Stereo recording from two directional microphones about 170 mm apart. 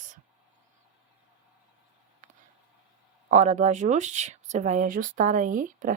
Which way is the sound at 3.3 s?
45° right (ahead or behind).